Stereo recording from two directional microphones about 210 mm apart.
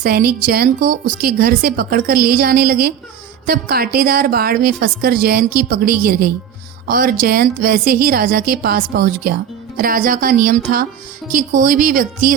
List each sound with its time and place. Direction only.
0.0 s a woman's voice: 45° right (ahead or behind)